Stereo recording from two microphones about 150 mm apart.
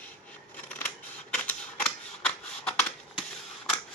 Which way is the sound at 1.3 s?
10° left (ahead or behind).